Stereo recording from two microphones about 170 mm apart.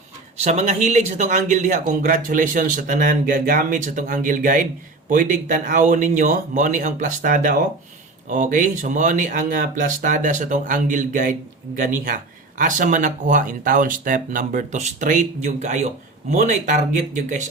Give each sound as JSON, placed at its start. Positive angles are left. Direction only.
{"t": 0.4, "sound": "speech", "side_deg": -40}